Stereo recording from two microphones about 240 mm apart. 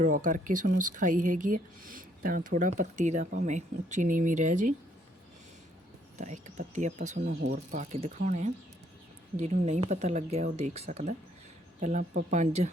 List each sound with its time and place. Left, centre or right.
0.0 s speech: right
6.1 s speech: right